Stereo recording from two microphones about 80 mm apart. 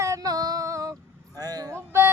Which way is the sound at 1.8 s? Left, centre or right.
Right.